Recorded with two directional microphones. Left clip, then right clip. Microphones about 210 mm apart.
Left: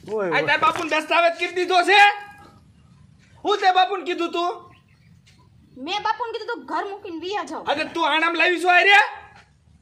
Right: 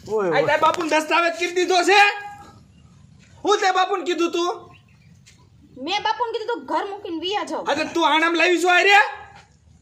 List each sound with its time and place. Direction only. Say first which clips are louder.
0.3 s speech: right 1 dB; 25° right (ahead or behind)
3.4 s speech: left 1 dB; 25° right (ahead or behind)
5.8 s a woman's voice: right 2 dB; 20° left (ahead or behind)
7.6 s speech: right 2 dB; 30° right (ahead or behind)